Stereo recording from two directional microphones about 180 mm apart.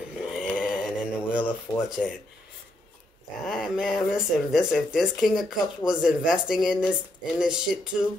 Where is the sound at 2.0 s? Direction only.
5° left (ahead or behind).